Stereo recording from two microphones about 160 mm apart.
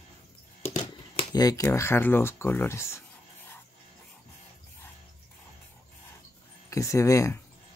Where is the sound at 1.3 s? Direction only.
25° left (ahead or behind).